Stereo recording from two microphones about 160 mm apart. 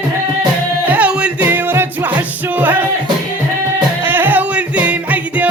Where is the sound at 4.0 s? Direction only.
15° right (ahead or behind).